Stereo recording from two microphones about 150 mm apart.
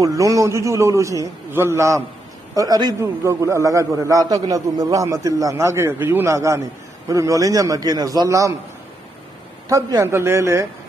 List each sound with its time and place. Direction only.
0.0 s a man's voice: 20° right (ahead or behind)
9.7 s a man's voice: 20° right (ahead or behind)